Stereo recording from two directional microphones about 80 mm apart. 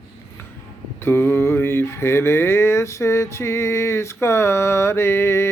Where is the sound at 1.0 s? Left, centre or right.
Left.